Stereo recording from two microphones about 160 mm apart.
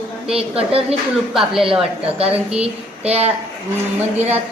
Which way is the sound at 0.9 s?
5° right (ahead or behind).